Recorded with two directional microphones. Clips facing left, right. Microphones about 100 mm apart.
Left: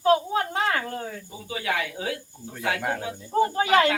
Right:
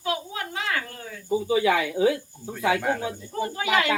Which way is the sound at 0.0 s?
40° left (ahead or behind).